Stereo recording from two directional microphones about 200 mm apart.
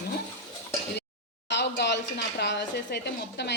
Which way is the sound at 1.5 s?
60° left (ahead or behind).